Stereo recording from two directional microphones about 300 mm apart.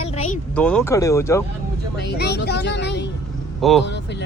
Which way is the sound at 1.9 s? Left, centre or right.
Left.